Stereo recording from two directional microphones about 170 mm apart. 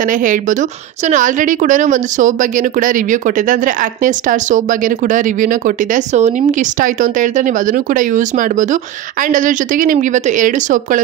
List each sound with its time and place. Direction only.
0.0 s a woman's voice: 50° right (ahead or behind)